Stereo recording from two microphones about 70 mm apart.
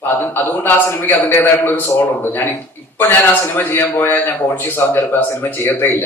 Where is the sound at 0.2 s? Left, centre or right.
Left.